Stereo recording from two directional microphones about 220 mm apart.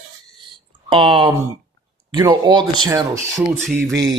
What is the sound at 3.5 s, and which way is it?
Speech, centre (ahead or behind).